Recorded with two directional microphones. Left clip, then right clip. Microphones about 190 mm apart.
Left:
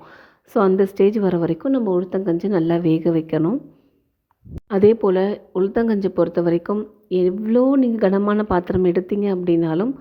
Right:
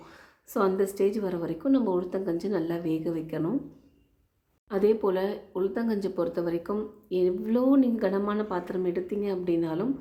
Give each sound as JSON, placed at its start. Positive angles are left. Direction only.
{"t": 0.0, "sound": "speech", "side_deg": 35}
{"t": 4.7, "sound": "speech", "side_deg": 35}